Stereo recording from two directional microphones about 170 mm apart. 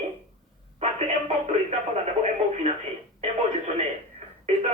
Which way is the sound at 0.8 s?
40° right (ahead or behind).